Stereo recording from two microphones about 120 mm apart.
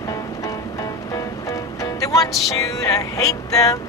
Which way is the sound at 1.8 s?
30° left (ahead or behind).